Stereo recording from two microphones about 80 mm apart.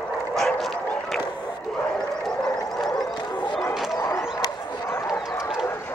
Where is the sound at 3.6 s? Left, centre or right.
Left.